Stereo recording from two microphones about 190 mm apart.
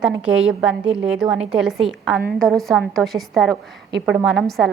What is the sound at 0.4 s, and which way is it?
A woman's voice, 5° right (ahead or behind).